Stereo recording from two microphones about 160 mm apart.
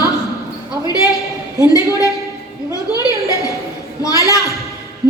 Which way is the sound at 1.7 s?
20° left (ahead or behind).